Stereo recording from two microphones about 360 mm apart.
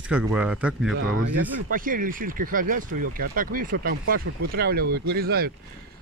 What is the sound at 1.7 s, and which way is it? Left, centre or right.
Speech, right.